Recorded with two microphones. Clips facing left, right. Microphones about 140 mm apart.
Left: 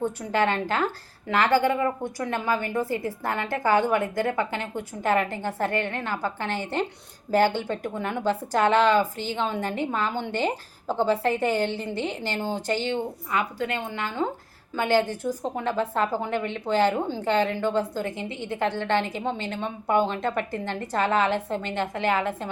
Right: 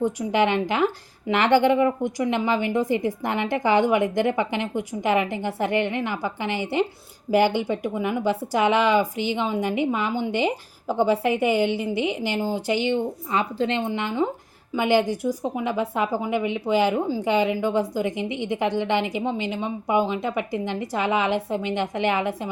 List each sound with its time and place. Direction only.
0.0 s a woman's voice: 15° right (ahead or behind)
13.3 s a woman's voice: 25° right (ahead or behind)